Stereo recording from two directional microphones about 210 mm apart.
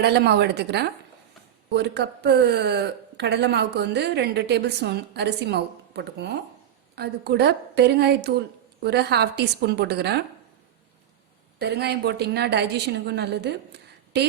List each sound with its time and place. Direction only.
0.0 s speech: 50° right (ahead or behind)
11.6 s speech: 50° right (ahead or behind)